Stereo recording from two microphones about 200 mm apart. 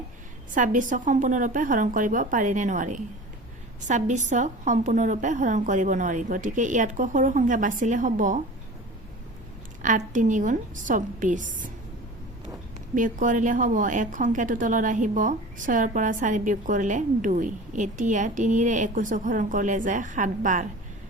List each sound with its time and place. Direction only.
0.5 s a woman's voice: 40° right (ahead or behind)
9.8 s a woman's voice: 40° right (ahead or behind)
12.9 s a woman's voice: 40° right (ahead or behind)